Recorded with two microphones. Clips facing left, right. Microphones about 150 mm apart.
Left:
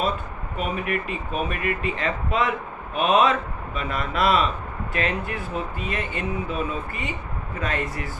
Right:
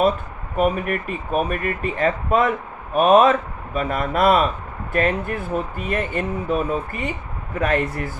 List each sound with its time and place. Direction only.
0.5 s speech: 50° right (ahead or behind)